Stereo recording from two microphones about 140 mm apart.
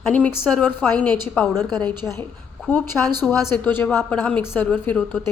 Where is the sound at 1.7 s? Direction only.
30° right (ahead or behind).